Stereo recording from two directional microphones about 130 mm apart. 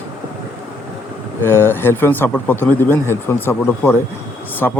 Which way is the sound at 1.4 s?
15° left (ahead or behind).